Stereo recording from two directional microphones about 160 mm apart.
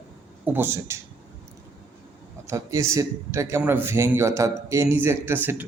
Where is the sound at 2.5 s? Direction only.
20° right (ahead or behind).